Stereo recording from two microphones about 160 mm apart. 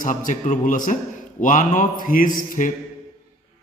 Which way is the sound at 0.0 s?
55° left (ahead or behind).